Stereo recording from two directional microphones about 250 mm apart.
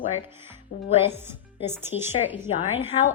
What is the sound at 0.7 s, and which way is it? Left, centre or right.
Speech, left.